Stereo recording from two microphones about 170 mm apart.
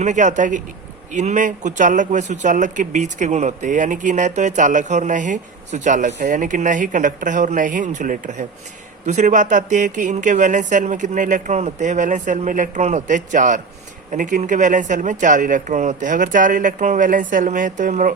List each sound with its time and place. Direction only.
0.0 s speech: 45° right (ahead or behind)